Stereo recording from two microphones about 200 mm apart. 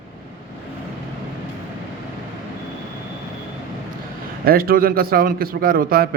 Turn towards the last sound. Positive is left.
turn(degrees=-50)  # may be behind; listen again after turning